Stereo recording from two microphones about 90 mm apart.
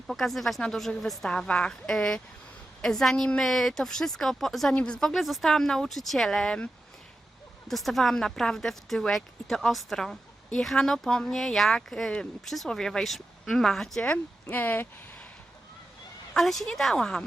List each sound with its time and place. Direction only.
0.1 s speech: centre (ahead or behind)
4.7 s speech: 10° left (ahead or behind)
7.7 s speech: centre (ahead or behind)
14.5 s speech: 20° left (ahead or behind)
16.3 s speech: 5° left (ahead or behind)